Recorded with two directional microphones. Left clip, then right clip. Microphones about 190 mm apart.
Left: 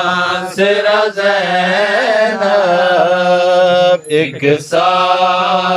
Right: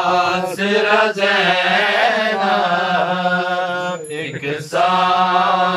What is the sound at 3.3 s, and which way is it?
Mantra, 60° left (ahead or behind).